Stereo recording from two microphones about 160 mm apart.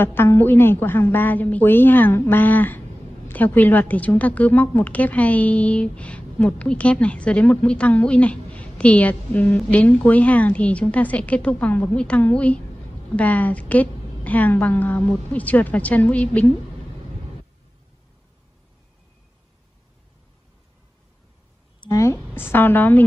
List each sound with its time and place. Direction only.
0.0 s a woman's voice: 15° left (ahead or behind)
21.7 s a sound: 30° left (ahead or behind)
22.3 s a woman's voice: 15° left (ahead or behind)